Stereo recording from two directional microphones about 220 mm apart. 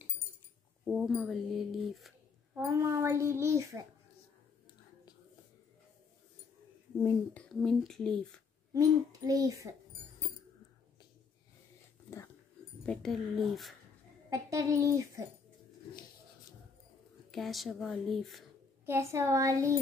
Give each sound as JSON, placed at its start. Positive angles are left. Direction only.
{"t": 0.8, "sound": "speech", "side_deg": 0}
{"t": 2.8, "sound": "hoot", "side_deg": -15}
{"t": 7.0, "sound": "speech", "side_deg": 10}
{"t": 7.6, "sound": "speech", "side_deg": 0}
{"t": 8.7, "sound": "hoot", "side_deg": -15}
{"t": 12.8, "sound": "speech", "side_deg": 5}
{"t": 14.3, "sound": "hoot", "side_deg": -15}
{"t": 17.3, "sound": "speech", "side_deg": 0}
{"t": 18.9, "sound": "hoot", "side_deg": -10}